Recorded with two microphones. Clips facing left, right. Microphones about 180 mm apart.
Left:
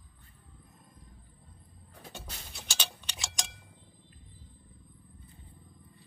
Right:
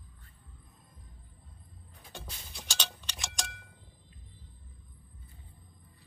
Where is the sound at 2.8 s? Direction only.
15° left (ahead or behind).